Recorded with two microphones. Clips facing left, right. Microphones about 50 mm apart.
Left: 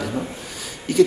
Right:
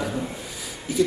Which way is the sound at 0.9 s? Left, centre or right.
Left.